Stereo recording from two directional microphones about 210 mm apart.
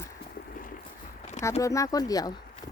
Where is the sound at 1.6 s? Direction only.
15° left (ahead or behind).